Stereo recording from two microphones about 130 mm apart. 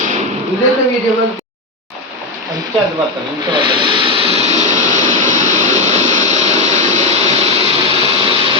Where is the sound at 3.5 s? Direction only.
40° right (ahead or behind); by 6.4 s 65° right (ahead or behind).